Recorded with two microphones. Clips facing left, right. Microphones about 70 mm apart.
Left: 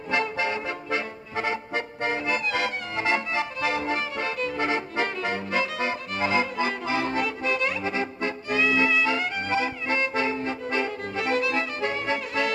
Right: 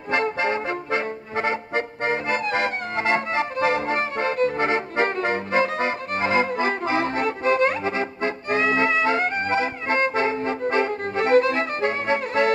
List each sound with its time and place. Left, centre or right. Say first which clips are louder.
0.1 s music: right 4 dB; right